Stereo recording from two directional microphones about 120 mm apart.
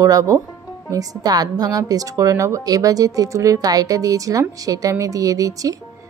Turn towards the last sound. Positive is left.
turn(degrees=-30)  # may be behind; listen again after turning